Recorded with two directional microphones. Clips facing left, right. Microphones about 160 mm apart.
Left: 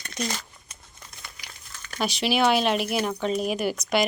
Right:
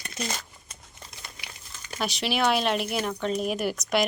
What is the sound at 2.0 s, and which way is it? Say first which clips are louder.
Speech: left 3 dB; centre (ahead or behind).